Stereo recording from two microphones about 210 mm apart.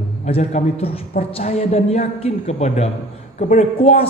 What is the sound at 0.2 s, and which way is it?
A man's voice, 30° left (ahead or behind).